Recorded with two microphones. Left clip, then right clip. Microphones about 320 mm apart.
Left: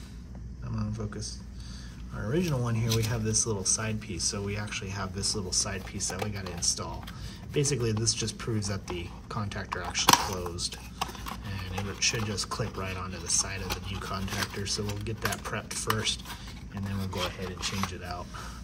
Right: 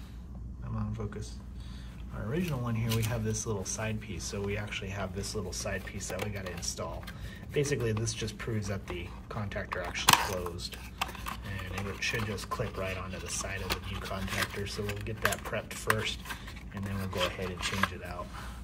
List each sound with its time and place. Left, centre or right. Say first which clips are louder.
0.7 s a sound: left 2 dB; centre
2.1 s speech: left 5 dB; centre
11.5 s speech: left 1 dB; centre